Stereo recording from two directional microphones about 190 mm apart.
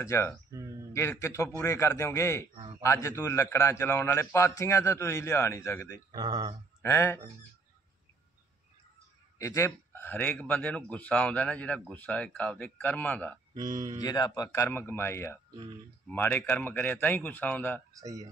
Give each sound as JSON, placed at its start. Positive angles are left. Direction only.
{"t": 0.0, "sound": "a man's voice", "side_deg": 15}
{"t": 6.1, "sound": "speech", "side_deg": -20}
{"t": 6.8, "sound": "speech", "side_deg": 15}
{"t": 9.4, "sound": "a man's voice", "side_deg": 15}
{"t": 13.6, "sound": "speech", "side_deg": -20}
{"t": 14.0, "sound": "a man's voice", "side_deg": 20}
{"t": 17.9, "sound": "speech", "side_deg": -20}